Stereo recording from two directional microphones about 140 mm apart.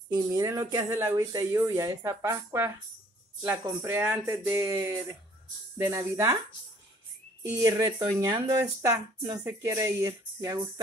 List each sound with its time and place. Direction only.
0.1 s speech: 25° right (ahead or behind)
3.6 s music: 15° right (ahead or behind)
5.8 s speech: 20° right (ahead or behind)
7.4 s speech: 25° right (ahead or behind)